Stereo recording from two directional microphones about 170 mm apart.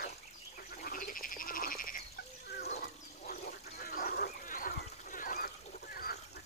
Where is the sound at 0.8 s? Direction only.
55° left (ahead or behind).